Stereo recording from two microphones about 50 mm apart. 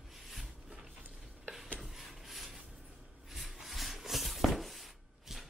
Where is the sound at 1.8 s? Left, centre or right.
Centre.